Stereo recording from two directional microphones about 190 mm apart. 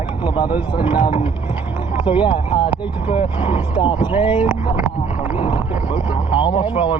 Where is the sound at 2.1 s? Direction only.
25° left (ahead or behind).